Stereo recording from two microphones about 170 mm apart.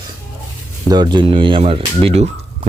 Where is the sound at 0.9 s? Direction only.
25° right (ahead or behind).